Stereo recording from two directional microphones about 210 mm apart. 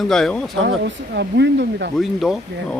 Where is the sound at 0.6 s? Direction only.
55° right (ahead or behind).